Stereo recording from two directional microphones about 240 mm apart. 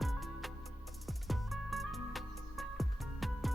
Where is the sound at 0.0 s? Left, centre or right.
Centre.